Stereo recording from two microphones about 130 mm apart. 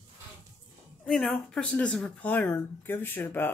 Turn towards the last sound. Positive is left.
turn(degrees=15)  # may be behind; listen again after turning